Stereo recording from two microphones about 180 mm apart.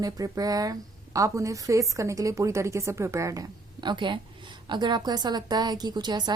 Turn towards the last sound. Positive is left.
turn(degrees=-25)  # may be behind; listen again after turning